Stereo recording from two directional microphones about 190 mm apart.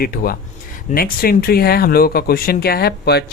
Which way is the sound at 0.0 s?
50° left (ahead or behind).